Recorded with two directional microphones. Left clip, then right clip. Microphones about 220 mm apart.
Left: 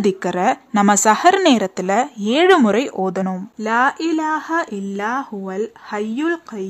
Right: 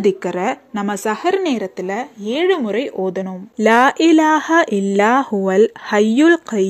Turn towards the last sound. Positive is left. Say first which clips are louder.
# right 9 dB
turn(degrees=-20)  # may be behind; listen again after turning